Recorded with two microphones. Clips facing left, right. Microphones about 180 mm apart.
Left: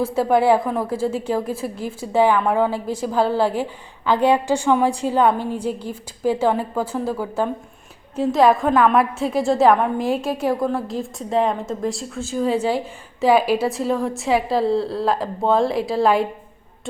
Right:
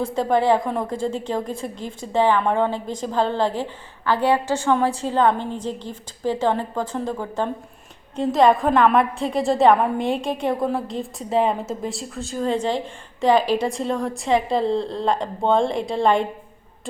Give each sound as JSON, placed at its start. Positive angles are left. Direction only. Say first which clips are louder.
{"t": 0.0, "sound": "a woman's voice", "louder": "left 2 dB", "side_deg": 10}